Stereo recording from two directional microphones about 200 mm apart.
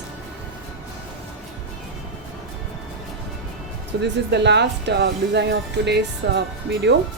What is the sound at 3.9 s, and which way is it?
Speech, 55° right (ahead or behind).